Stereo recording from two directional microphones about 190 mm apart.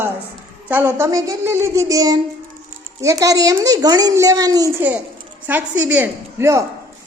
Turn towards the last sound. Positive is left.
turn(degrees=-15)  # may be behind; listen again after turning